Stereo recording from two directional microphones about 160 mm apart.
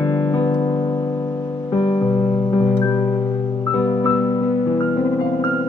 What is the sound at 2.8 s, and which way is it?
Music, 20° left (ahead or behind).